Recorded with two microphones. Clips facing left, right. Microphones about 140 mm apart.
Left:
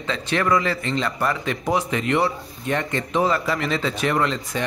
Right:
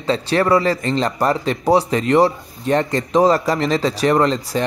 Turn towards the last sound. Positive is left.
turn(degrees=-35)  # may be behind; listen again after turning